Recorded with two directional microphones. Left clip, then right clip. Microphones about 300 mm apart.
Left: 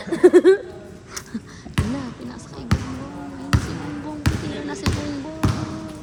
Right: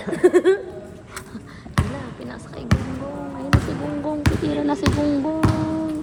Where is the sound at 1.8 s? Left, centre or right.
Centre.